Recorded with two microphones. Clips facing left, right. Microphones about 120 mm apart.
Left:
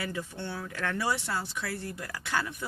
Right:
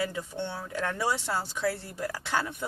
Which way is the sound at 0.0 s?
20° right (ahead or behind).